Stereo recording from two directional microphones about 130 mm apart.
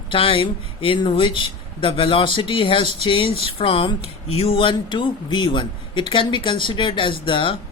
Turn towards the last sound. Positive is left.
turn(degrees=40)  # may be behind; listen again after turning